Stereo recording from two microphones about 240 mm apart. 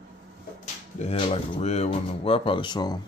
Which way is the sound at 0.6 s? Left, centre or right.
Left.